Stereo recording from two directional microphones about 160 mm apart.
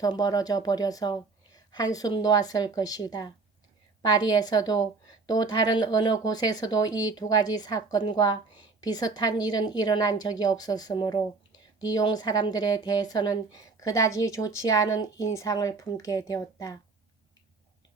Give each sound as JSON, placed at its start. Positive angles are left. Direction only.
{"t": 0.0, "sound": "a woman's voice", "side_deg": 25}